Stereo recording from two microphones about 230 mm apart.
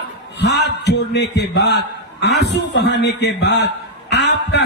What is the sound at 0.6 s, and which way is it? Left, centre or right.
A man's voice, left.